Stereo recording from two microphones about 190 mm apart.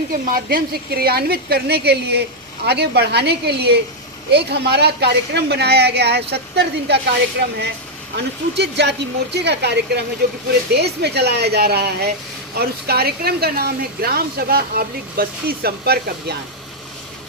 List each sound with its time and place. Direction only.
0.1 s speech: 50° right (ahead or behind)
8.1 s speech: 65° right (ahead or behind)